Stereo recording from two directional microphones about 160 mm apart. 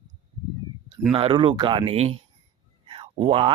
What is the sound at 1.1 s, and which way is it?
Speech, 35° right (ahead or behind).